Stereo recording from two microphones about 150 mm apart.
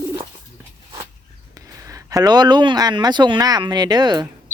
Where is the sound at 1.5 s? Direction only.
20° right (ahead or behind).